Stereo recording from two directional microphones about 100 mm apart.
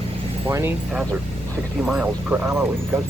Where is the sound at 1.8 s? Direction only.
5° right (ahead or behind).